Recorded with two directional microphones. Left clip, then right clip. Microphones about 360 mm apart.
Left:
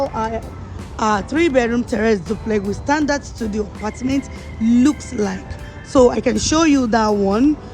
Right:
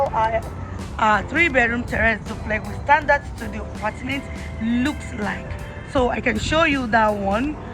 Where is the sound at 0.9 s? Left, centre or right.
Centre.